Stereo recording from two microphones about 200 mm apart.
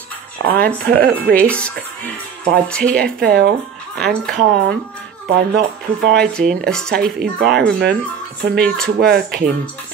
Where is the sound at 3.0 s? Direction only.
50° right (ahead or behind).